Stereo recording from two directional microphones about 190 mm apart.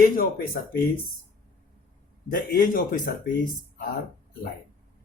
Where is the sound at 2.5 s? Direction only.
45° left (ahead or behind).